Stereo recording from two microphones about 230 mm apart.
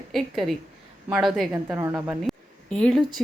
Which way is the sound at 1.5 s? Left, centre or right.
Centre.